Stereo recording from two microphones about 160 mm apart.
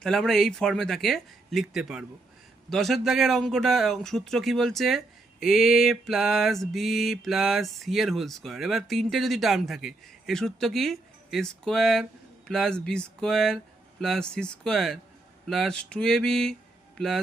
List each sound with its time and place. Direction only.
0.0 s a man's voice: centre (ahead or behind)